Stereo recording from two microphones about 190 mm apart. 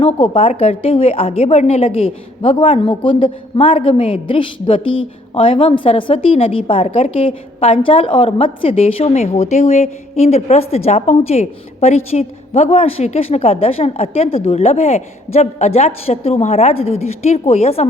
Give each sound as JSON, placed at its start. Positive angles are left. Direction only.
{"t": 0.0, "sound": "a woman's voice", "side_deg": 30}